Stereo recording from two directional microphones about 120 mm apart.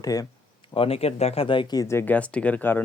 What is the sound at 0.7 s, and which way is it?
Speech, 50° left (ahead or behind).